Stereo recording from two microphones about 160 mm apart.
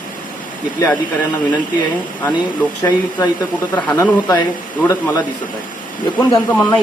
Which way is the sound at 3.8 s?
20° left (ahead or behind).